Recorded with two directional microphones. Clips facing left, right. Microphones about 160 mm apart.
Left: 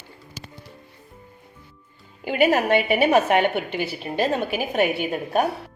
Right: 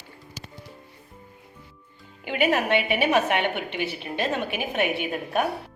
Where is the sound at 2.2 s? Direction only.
40° left (ahead or behind).